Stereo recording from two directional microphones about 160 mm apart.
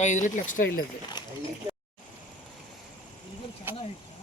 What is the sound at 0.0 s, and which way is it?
Speech, 50° left (ahead or behind).